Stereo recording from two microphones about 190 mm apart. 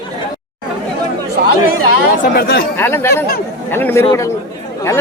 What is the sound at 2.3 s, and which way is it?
Speech, 60° left (ahead or behind).